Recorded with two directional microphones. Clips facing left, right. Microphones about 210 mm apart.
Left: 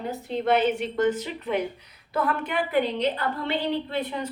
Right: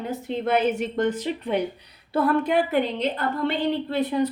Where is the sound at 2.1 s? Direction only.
35° right (ahead or behind).